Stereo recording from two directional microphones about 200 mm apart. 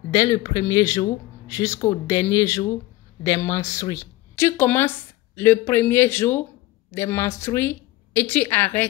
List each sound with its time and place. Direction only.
0.1 s a woman's voice: 15° left (ahead or behind)